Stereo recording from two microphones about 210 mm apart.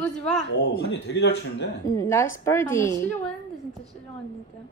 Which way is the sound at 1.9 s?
15° left (ahead or behind).